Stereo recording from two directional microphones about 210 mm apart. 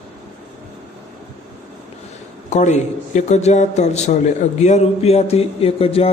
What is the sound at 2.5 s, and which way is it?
A man's voice, 35° left (ahead or behind).